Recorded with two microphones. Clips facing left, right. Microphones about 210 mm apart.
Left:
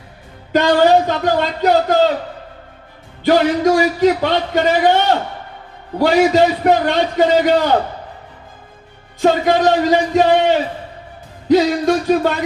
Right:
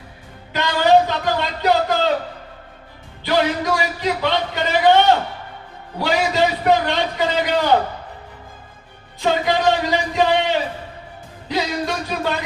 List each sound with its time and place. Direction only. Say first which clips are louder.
0.5 s a sound: left 4 dB; 50° left (ahead or behind)
3.2 s a man's voice: left 6 dB; 50° left (ahead or behind)
6.0 s a man's voice: left 7 dB; 50° left (ahead or behind)
9.2 s a man's voice: left 5 dB; 45° left (ahead or behind)